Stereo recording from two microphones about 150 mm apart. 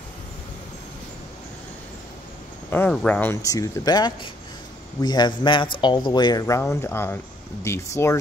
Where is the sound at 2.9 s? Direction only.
5° left (ahead or behind).